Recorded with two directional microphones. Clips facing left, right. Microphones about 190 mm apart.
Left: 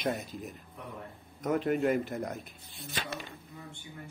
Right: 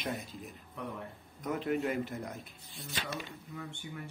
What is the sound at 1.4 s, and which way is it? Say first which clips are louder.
Speech: left 4 dB; 45° left (ahead or behind).